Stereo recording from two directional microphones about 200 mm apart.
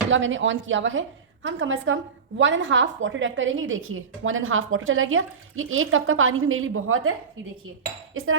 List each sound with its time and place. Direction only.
0.1 s a woman's voice: 75° right (ahead or behind); by 7.1 s 90° right
8.1 s speech: 90° right